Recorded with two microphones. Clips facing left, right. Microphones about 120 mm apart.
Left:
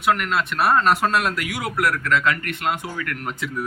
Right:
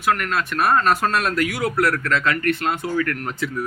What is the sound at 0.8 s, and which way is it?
Speech, 20° left (ahead or behind).